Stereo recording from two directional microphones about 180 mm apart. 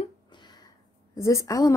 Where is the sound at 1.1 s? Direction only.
15° left (ahead or behind).